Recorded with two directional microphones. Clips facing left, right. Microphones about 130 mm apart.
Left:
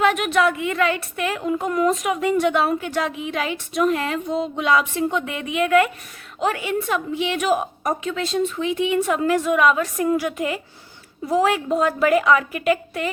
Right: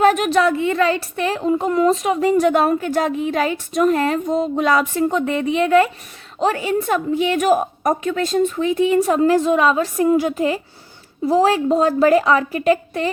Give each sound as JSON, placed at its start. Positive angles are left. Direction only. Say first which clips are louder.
{"t": 0.0, "sound": "speech", "louder": "right 4 dB", "side_deg": -40}